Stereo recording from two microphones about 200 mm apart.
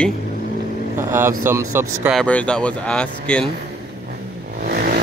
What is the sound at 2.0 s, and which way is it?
Speech, 5° left (ahead or behind).